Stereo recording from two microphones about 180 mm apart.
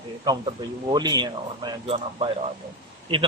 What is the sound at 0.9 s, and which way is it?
A man's voice, 25° right (ahead or behind).